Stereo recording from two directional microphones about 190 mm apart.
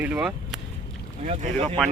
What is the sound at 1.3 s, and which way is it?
Speech, 40° right (ahead or behind).